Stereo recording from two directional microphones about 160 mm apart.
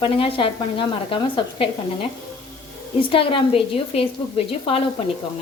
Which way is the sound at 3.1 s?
35° left (ahead or behind).